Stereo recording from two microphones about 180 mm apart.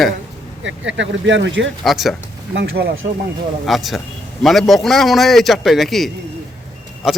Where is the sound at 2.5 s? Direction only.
70° right (ahead or behind).